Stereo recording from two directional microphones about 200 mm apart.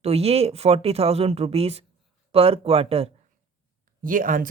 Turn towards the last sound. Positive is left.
turn(degrees=-45)  # may be behind; listen again after turning